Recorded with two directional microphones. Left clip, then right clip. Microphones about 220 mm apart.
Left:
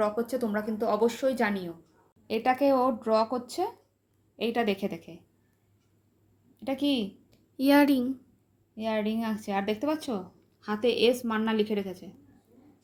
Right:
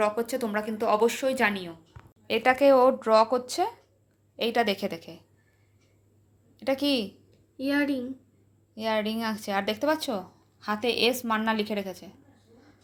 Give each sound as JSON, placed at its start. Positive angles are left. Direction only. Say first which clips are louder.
{"t": 0.0, "sound": "a woman's voice", "louder": "right 2 dB", "side_deg": 10}
{"t": 2.2, "sound": "speech", "louder": "right 4 dB", "side_deg": -5}
{"t": 6.6, "sound": "speech", "louder": "right 3 dB", "side_deg": -5}
{"t": 7.5, "sound": "a woman's voice", "louder": "left 5 dB", "side_deg": 55}
{"t": 8.7, "sound": "speech", "louder": "right 2 dB", "side_deg": -5}